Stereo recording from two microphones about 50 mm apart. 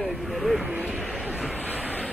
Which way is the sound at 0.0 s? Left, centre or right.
Centre.